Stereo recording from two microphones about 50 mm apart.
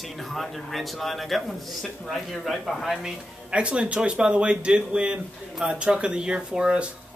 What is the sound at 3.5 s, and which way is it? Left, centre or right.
Speech, right.